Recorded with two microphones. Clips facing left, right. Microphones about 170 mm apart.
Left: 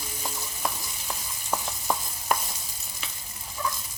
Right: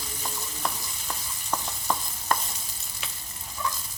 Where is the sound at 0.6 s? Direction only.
10° left (ahead or behind).